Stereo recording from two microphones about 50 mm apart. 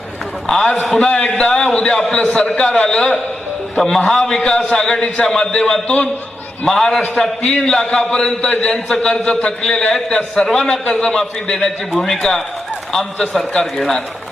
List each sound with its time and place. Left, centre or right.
0.4 s a man's voice: centre
2.4 s a man's voice: centre
9.0 s a man's voice: centre
11.9 s a man's voice: centre